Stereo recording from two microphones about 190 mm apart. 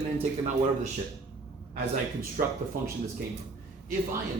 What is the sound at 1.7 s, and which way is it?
Speech, 60° right (ahead or behind).